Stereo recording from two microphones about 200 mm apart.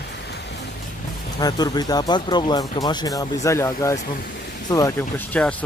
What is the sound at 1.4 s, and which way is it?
Speech, 20° left (ahead or behind).